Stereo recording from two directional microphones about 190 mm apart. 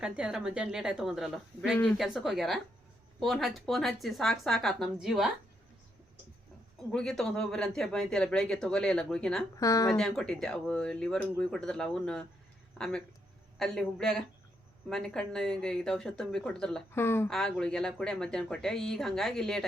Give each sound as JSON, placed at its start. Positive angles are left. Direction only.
{"t": 0.0, "sound": "speech", "side_deg": -5}
{"t": 6.9, "sound": "speech", "side_deg": 5}
{"t": 9.6, "sound": "speech", "side_deg": 20}
{"t": 10.0, "sound": "speech", "side_deg": 5}
{"t": 13.6, "sound": "speech", "side_deg": 0}